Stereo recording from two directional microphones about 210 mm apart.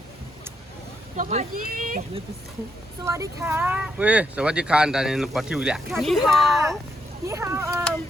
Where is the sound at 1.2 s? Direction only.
35° right (ahead or behind).